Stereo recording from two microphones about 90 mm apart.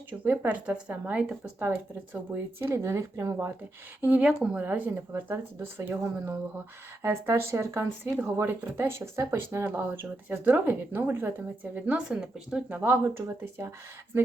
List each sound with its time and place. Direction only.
0.1 s a woman's voice: 15° right (ahead or behind)
2.3 s speech: 30° right (ahead or behind)
4.0 s a woman's voice: 15° right (ahead or behind)